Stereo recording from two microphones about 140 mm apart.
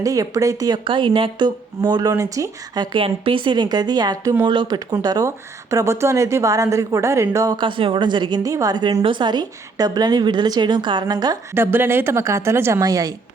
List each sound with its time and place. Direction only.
0.0 s speech: 25° right (ahead or behind)
0.9 s speech: 35° right (ahead or behind)
11.5 s speech: 15° right (ahead or behind)